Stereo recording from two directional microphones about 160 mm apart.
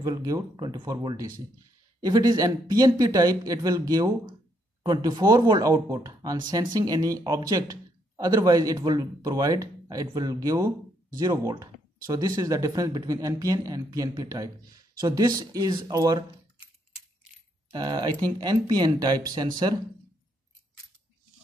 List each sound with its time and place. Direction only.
0.0 s speech: 20° right (ahead or behind)
17.6 s speech: 25° right (ahead or behind)